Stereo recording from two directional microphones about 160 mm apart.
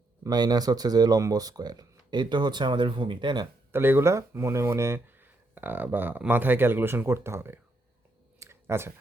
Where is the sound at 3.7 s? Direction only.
15° right (ahead or behind).